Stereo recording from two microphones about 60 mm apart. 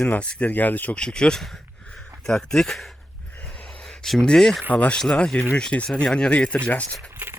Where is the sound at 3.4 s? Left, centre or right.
Centre.